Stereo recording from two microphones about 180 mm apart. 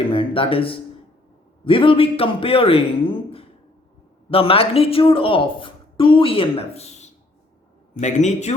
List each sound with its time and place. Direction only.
0.1 s a woman's voice: 30° left (ahead or behind)